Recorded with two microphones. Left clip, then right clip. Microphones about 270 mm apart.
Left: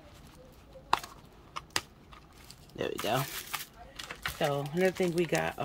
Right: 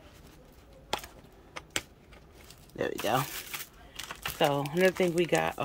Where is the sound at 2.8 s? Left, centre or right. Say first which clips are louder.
Right 2 dB; centre.